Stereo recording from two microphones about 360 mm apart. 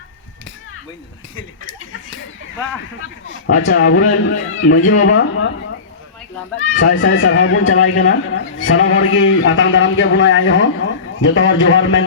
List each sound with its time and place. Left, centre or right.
3.0 s speech: left
6.6 s speech: left